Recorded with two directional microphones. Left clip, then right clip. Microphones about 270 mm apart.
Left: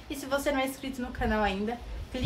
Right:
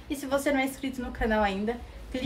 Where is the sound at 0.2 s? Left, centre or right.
Centre.